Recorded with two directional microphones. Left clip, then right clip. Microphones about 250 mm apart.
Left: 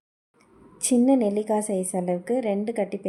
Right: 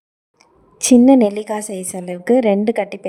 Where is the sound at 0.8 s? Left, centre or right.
Right.